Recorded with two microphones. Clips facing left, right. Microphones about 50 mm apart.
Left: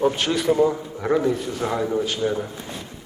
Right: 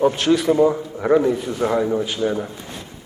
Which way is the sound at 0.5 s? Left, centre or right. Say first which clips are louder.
Right 3 dB; centre.